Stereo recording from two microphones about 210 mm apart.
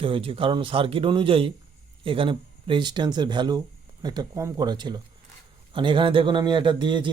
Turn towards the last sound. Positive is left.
turn(degrees=-20)  # may be behind; listen again after turning